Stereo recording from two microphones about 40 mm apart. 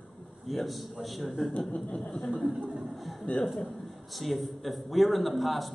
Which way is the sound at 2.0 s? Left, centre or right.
Left.